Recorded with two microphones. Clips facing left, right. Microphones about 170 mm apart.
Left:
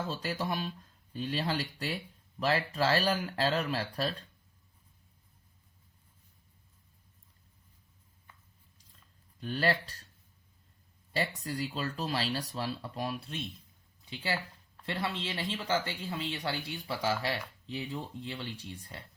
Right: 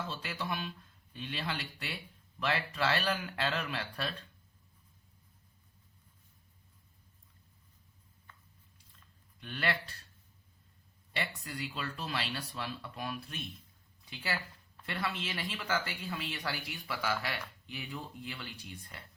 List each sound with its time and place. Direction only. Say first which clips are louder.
0.1 s speech: left 4 dB; 40° left (ahead or behind)
9.4 s speech: left 5 dB; 35° left (ahead or behind)
11.1 s speech: left 5 dB; 35° left (ahead or behind)